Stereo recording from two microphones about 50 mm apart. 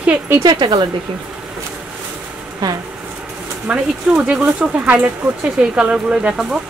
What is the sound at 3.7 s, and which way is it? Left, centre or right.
Speech, right.